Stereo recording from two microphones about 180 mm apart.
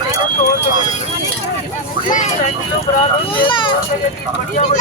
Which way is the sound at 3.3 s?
25° left (ahead or behind).